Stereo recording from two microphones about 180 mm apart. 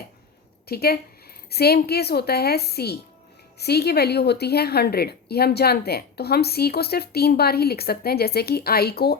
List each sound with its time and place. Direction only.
0.7 s a woman's voice: 60° left (ahead or behind)